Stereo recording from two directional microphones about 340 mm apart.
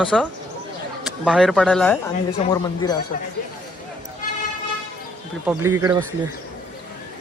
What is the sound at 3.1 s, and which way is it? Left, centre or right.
Speech, left.